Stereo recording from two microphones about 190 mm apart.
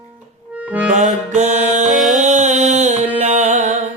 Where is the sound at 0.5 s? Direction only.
10° right (ahead or behind).